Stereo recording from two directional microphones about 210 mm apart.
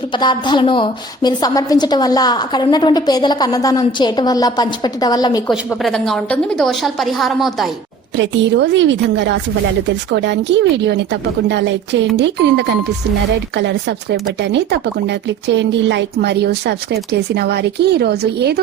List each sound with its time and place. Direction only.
0.1 s a woman's voice: 20° left (ahead or behind)
5.5 s a woman's voice: centre (ahead or behind)
8.1 s a woman's voice: 60° right (ahead or behind)